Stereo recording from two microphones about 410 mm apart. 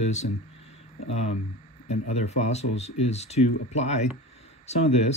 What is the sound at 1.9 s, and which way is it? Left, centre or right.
Speech, centre.